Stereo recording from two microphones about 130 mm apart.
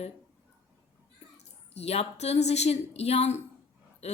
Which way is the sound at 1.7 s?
50° left (ahead or behind).